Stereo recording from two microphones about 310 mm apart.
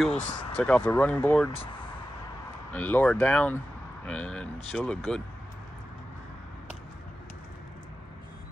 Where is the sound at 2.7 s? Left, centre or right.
Centre.